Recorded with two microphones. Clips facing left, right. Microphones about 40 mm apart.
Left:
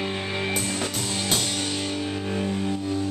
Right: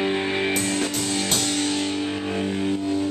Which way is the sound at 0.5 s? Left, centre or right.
Centre.